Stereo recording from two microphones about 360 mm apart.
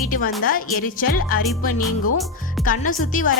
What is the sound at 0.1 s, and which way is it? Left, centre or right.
A woman's voice, left.